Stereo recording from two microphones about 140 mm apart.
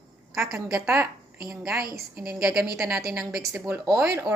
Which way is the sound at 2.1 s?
90° right.